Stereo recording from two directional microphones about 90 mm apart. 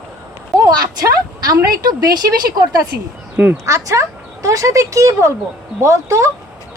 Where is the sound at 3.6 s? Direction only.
35° right (ahead or behind).